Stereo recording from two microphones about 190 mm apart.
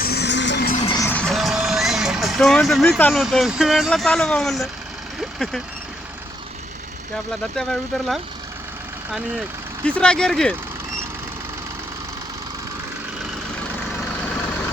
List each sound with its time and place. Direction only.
0.0 s music: 60° left (ahead or behind)
1.0 s speech: 5° left (ahead or behind)
7.5 s speech: centre (ahead or behind)
9.8 s speech: 5° left (ahead or behind)